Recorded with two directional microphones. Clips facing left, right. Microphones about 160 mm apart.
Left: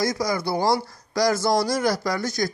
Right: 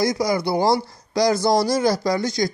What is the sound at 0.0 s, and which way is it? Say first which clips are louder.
Speech: right 4 dB; 25° right (ahead or behind).